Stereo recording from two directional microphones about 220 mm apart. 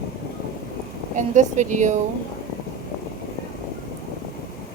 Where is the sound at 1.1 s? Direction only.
35° right (ahead or behind).